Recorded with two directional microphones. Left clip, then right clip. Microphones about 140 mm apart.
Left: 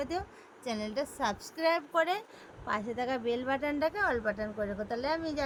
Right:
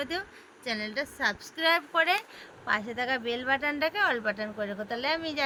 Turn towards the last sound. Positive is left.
turn(degrees=10)  # may be behind; listen again after turning